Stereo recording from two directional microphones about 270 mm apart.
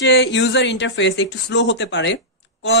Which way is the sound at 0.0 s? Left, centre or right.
Left.